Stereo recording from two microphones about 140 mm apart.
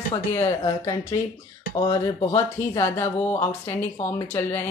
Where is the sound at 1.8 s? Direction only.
30° left (ahead or behind).